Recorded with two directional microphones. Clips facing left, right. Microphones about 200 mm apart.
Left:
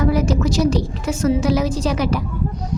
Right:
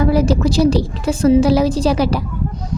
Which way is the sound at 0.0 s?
30° right (ahead or behind).